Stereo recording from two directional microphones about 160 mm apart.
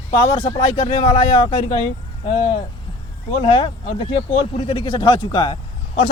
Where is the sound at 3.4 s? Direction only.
35° left (ahead or behind).